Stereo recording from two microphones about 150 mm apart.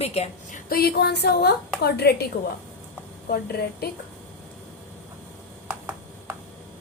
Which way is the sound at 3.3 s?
90° left.